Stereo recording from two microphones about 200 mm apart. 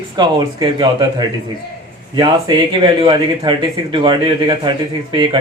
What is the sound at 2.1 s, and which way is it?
Speech, 25° right (ahead or behind).